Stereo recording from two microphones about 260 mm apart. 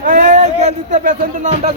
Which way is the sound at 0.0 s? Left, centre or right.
Right.